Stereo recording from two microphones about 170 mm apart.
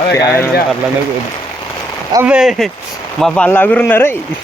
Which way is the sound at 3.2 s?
10° left (ahead or behind).